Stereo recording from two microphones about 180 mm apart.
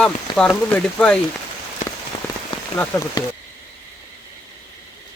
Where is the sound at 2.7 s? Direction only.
15° left (ahead or behind).